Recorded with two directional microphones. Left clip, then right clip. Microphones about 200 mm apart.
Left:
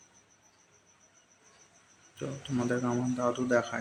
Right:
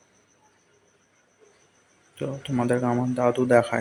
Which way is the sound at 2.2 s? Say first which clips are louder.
Right 7 dB; 15° right (ahead or behind).